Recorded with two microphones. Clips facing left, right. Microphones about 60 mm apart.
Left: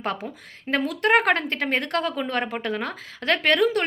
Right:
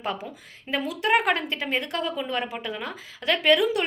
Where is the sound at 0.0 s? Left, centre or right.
Left.